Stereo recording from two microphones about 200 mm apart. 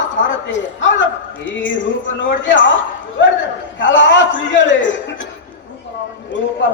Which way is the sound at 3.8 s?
65° left (ahead or behind).